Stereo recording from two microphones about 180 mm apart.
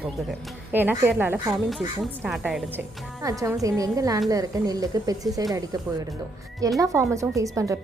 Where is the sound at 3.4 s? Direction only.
20° right (ahead or behind).